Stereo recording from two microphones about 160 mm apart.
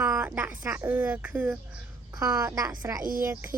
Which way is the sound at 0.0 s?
15° right (ahead or behind).